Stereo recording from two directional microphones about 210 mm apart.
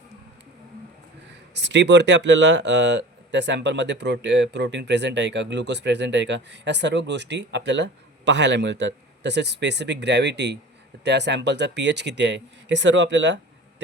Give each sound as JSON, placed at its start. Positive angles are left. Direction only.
{"t": 1.5, "sound": "speech", "side_deg": -55}